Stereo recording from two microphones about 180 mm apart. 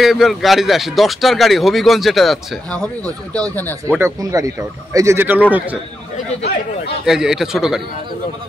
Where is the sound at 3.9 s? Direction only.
15° right (ahead or behind).